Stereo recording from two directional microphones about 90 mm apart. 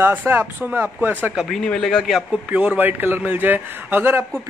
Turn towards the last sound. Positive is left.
turn(degrees=-25)  # may be behind; listen again after turning